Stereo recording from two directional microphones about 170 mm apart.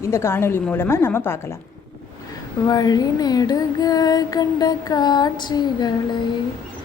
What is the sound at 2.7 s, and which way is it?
Female singing, 20° left (ahead or behind).